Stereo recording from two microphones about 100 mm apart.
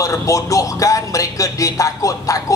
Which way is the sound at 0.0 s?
35° left (ahead or behind).